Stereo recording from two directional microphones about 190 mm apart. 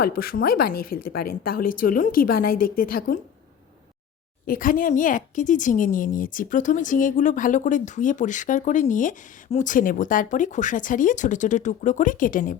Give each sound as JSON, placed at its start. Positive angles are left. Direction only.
{"t": 0.0, "sound": "speech", "side_deg": 50}
{"t": 4.4, "sound": "speech", "side_deg": 45}